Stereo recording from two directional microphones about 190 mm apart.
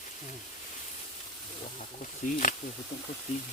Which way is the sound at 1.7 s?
40° left (ahead or behind).